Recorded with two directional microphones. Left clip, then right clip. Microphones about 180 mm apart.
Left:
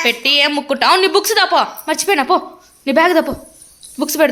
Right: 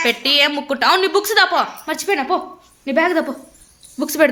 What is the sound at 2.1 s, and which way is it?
A woman's voice, 30° left (ahead or behind).